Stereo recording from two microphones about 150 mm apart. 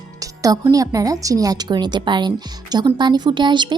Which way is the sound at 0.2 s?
25° right (ahead or behind).